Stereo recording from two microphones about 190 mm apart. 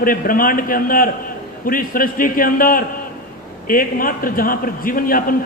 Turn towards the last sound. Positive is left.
turn(degrees=50)  # may be behind; listen again after turning